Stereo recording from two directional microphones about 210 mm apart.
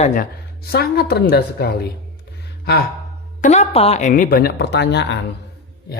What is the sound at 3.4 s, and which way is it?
Speech, 35° left (ahead or behind).